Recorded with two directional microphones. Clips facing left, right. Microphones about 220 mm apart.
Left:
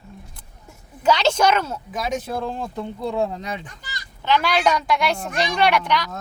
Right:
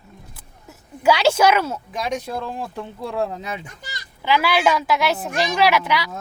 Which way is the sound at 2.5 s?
5° right (ahead or behind).